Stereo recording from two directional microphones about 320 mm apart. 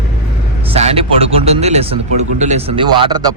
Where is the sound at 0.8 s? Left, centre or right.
Centre.